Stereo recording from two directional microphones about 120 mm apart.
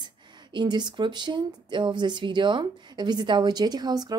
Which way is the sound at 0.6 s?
40° right (ahead or behind).